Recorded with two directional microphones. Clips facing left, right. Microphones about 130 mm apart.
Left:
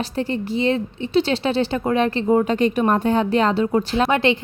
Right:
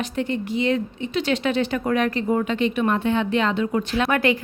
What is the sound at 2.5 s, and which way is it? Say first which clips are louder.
A woman's voice: left 3 dB; 40° left (ahead or behind).